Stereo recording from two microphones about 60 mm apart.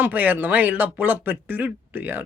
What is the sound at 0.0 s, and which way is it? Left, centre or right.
Speech, right.